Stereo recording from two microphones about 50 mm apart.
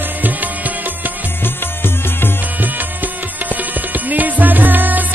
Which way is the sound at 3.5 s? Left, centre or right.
Right.